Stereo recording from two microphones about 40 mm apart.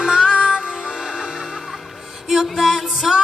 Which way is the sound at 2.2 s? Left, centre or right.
Centre.